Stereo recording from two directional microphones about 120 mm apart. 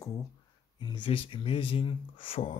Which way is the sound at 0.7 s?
40° left (ahead or behind).